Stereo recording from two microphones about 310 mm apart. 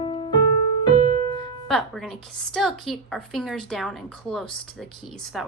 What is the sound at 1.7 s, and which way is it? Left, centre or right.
A woman's voice, centre.